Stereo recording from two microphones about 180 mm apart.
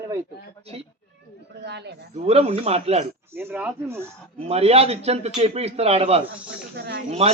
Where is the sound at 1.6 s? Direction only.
70° right (ahead or behind).